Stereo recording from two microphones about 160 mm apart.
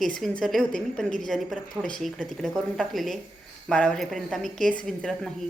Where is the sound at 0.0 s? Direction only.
5° left (ahead or behind).